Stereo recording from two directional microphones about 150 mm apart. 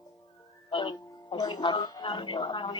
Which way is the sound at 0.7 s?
30° left (ahead or behind).